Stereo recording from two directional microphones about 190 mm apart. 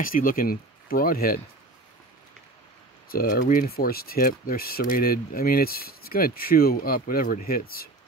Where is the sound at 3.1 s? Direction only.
50° left (ahead or behind).